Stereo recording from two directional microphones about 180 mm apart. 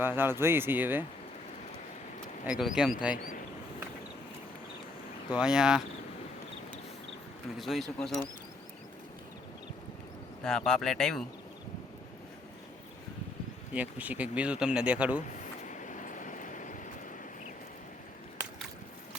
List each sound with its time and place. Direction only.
0.0 s speech: 10° right (ahead or behind)
2.5 s speech: 5° right (ahead or behind)
5.3 s speech: 5° right (ahead or behind)
7.6 s speech: centre (ahead or behind)
10.4 s speech: 5° left (ahead or behind)
13.7 s speech: 10° right (ahead or behind)
15.6 s vehicle: 45° left (ahead or behind)